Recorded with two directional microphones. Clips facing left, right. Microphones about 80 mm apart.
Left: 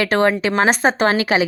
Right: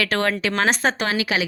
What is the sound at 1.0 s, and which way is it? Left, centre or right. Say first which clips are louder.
Speech: left 6 dB; left.